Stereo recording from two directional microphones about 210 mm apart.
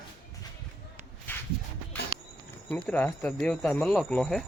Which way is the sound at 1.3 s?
10° left (ahead or behind).